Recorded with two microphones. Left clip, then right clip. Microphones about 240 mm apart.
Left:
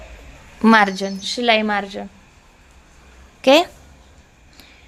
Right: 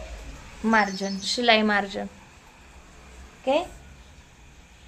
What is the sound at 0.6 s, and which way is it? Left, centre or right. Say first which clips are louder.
Speech: left 8 dB; left.